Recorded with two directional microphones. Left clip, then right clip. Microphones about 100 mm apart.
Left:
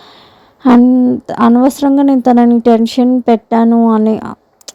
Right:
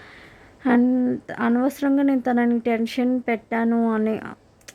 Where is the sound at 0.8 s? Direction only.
30° left (ahead or behind).